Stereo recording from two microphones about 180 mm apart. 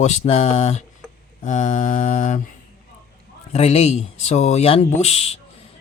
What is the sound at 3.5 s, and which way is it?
Speech, 35° left (ahead or behind).